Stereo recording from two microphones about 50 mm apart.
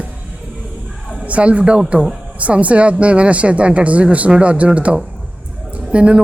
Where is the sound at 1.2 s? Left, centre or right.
Right.